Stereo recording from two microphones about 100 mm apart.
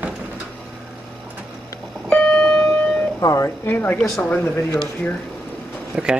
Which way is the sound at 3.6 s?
20° left (ahead or behind).